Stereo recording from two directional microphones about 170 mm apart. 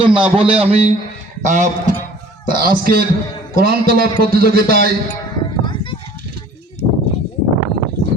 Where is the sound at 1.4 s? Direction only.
45° right (ahead or behind).